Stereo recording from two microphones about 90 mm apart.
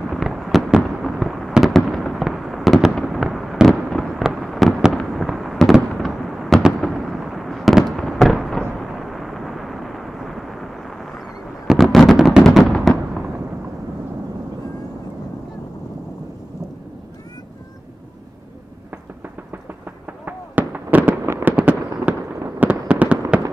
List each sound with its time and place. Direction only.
0.1 s fireworks: centre (ahead or behind)
11.6 s a sound: 5° right (ahead or behind)
12.4 s fireworks: 5° left (ahead or behind)
20.1 s fireworks: 20° right (ahead or behind)
21.5 s fireworks: 15° right (ahead or behind)